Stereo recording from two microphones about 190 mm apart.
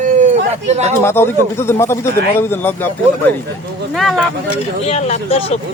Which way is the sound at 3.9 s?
Centre (ahead or behind).